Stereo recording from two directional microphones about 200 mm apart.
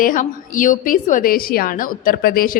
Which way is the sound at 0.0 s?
40° left (ahead or behind).